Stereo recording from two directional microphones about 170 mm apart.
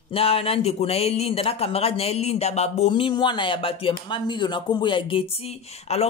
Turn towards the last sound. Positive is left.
turn(degrees=35)  # may be behind; listen again after turning